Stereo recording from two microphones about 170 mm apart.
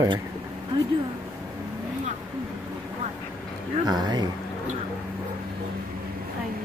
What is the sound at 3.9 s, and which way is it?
Speech, 25° right (ahead or behind).